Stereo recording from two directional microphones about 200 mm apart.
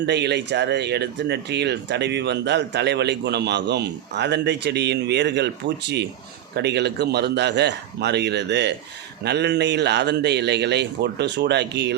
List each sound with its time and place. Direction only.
0.0 s speech: 55° right (ahead or behind)